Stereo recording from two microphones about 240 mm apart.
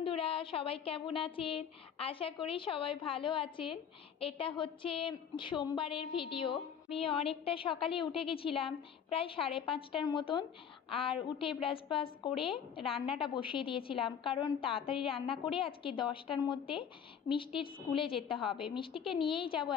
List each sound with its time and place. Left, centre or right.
0.0 s speech: left